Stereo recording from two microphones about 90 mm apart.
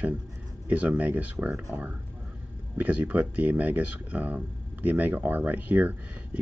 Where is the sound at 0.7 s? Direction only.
15° right (ahead or behind).